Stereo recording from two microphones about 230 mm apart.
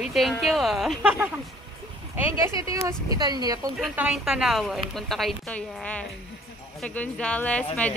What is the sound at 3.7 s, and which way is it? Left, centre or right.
A woman's voice, centre.